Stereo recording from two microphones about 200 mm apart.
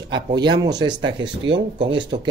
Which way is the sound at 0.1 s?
20° right (ahead or behind).